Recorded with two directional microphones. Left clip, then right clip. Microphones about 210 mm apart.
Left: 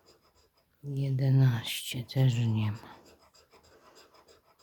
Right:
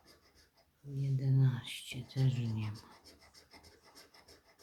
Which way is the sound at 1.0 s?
50° left (ahead or behind).